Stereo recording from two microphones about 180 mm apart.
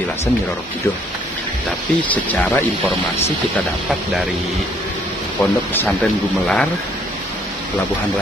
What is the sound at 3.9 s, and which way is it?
Speech, centre (ahead or behind).